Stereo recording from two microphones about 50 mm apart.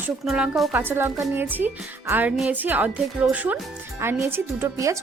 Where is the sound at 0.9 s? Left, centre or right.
Right.